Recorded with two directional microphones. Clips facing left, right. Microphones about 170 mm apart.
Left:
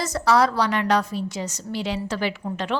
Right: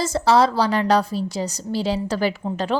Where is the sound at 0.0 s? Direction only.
30° right (ahead or behind).